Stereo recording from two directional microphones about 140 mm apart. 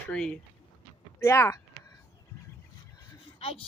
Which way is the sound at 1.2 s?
20° left (ahead or behind).